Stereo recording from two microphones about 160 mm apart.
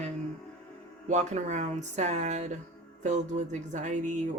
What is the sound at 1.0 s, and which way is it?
Speech, 45° right (ahead or behind).